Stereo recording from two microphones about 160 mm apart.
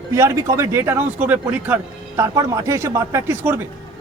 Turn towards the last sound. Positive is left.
turn(degrees=-15)  # may be behind; listen again after turning